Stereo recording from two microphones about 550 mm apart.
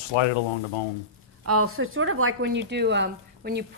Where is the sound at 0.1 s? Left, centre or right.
Left.